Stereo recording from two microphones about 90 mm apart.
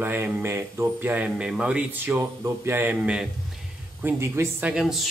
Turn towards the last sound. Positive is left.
turn(degrees=-5)  # may be behind; listen again after turning